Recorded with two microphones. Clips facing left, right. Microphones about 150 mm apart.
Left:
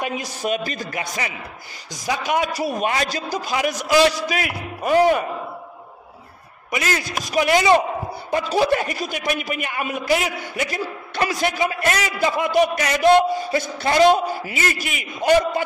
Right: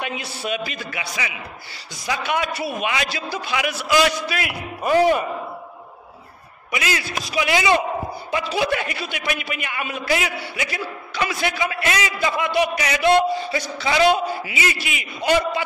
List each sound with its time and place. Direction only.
0.0 s a man's voice: 40° left (ahead or behind)
6.7 s a man's voice: 40° left (ahead or behind)